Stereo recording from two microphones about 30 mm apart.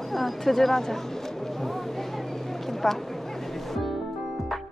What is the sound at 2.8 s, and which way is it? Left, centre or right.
Speech, centre.